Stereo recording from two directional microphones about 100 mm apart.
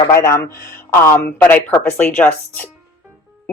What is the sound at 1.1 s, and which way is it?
Speech, 20° left (ahead or behind).